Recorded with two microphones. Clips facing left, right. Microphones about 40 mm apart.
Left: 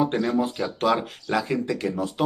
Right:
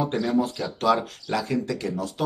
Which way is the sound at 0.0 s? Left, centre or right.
Left.